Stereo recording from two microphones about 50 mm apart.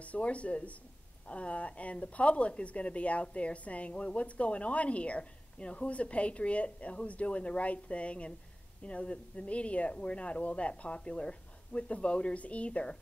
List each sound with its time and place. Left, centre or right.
0.0 s speech: left